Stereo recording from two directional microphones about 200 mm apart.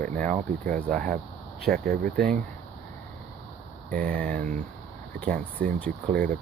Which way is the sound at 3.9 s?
45° right (ahead or behind).